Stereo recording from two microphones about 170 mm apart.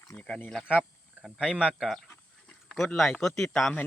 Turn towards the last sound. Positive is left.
turn(degrees=5)  # may be behind; listen again after turning